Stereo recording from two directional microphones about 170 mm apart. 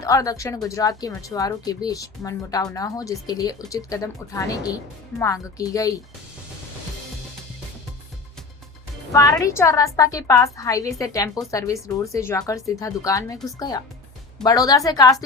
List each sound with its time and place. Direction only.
0.0 s a woman's voice: 20° left (ahead or behind)
9.1 s a woman's voice: 20° left (ahead or behind)